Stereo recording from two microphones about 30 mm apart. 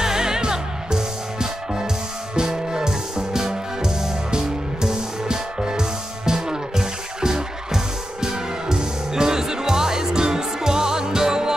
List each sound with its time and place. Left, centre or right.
0.0 s music: centre